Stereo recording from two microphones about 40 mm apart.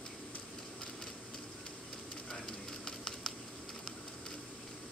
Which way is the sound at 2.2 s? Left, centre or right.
Centre.